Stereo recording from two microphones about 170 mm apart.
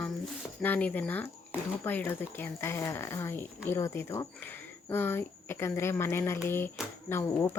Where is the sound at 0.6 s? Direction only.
10° left (ahead or behind).